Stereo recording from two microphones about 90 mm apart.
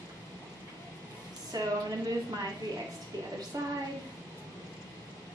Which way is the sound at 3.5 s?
40° right (ahead or behind).